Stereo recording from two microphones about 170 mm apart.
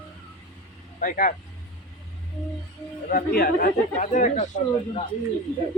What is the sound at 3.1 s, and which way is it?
Speech, 65° left (ahead or behind).